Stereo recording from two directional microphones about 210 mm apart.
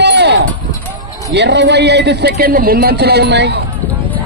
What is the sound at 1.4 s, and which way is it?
Speech, 55° right (ahead or behind).